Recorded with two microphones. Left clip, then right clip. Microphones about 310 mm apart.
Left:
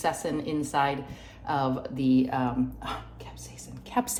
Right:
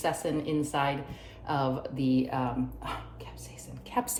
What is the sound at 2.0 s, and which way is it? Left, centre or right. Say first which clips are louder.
Speech: left 4 dB; left.